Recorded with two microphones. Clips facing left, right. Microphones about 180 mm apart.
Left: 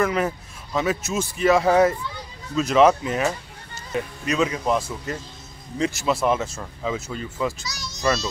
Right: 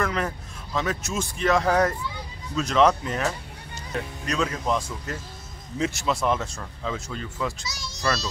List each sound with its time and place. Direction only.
0.0 s speech: 5° left (ahead or behind)
7.6 s a child's voice: 25° right (ahead or behind)